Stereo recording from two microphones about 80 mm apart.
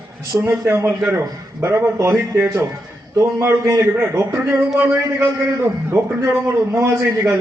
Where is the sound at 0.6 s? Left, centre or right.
Right.